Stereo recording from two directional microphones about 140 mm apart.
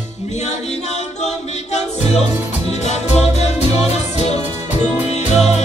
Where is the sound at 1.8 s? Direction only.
50° left (ahead or behind).